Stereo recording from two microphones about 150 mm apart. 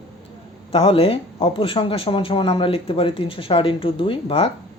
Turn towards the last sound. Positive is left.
turn(degrees=40)  # may be behind; listen again after turning